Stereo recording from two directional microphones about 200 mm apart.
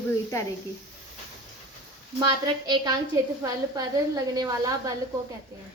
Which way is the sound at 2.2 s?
20° right (ahead or behind).